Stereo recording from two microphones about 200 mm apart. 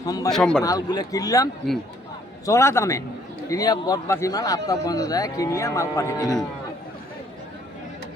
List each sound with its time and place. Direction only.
0.0 s a man's voice: 20° left (ahead or behind)
0.3 s a man's voice: 5° left (ahead or behind)
0.6 s a man's voice: 20° left (ahead or behind)
2.5 s a man's voice: 15° left (ahead or behind)